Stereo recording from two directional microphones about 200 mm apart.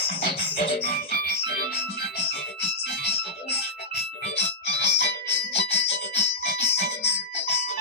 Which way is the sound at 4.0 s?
55° left (ahead or behind).